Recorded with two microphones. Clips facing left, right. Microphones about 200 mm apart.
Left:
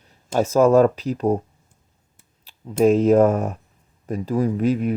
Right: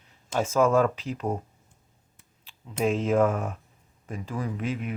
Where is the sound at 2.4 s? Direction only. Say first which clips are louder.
Left 10 dB; 40° left (ahead or behind).